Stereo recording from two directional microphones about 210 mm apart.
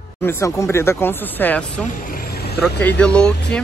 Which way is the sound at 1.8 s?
45° left (ahead or behind).